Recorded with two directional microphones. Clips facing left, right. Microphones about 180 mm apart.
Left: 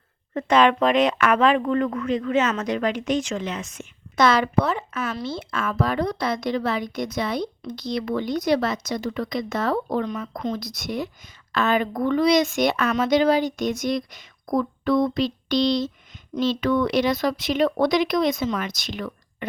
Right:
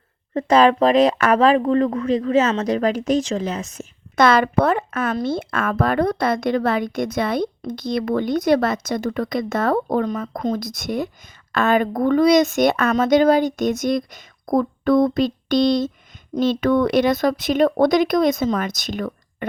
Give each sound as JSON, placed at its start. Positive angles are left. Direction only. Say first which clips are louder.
{"t": 0.3, "sound": "speech", "louder": "right 4 dB", "side_deg": -35}
{"t": 4.1, "sound": "speech", "louder": "right 3 dB", "side_deg": -55}